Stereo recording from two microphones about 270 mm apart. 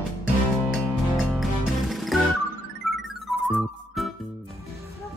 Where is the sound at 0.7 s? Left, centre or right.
Centre.